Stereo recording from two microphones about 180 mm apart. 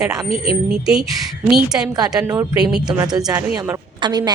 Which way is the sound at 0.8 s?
5° right (ahead or behind).